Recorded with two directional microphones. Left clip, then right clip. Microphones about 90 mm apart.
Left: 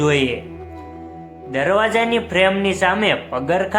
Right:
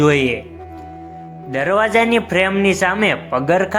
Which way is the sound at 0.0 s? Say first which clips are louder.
Right 3 dB; 40° right (ahead or behind).